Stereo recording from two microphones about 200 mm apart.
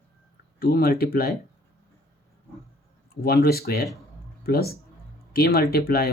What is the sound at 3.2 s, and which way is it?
Speech, 50° left (ahead or behind).